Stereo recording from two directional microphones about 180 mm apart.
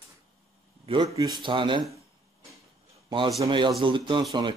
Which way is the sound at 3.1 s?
25° right (ahead or behind).